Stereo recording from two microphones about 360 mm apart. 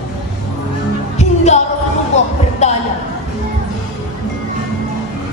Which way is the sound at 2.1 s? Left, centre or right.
Centre.